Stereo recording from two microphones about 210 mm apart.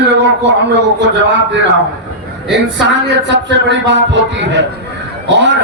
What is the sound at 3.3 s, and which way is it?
A man's voice, 55° right (ahead or behind).